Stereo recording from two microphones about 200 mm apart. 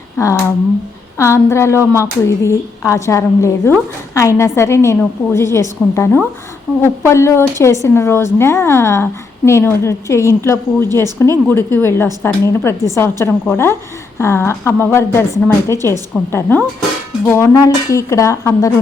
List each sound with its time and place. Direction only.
1.2 s a woman's voice: 15° left (ahead or behind)